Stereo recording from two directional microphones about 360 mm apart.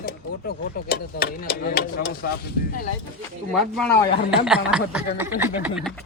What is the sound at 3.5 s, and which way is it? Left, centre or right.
Speech, centre.